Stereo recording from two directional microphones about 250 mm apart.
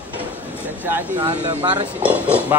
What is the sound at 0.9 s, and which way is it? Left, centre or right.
Speech, centre.